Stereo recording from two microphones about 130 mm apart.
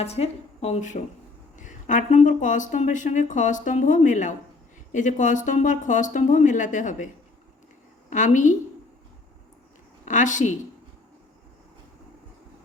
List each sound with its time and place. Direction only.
0.0 s a woman's voice: 50° left (ahead or behind); by 7.1 s 70° left (ahead or behind)
8.1 s speech: 75° left (ahead or behind)
10.1 s speech: 75° left (ahead or behind)